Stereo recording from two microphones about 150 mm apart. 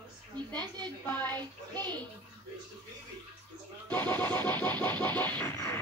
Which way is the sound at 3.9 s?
10° left (ahead or behind).